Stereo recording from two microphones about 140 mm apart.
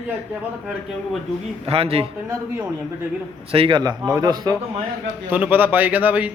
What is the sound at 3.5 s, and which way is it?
A man's voice, 40° right (ahead or behind).